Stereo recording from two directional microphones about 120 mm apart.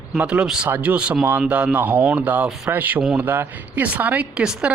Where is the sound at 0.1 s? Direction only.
10° right (ahead or behind).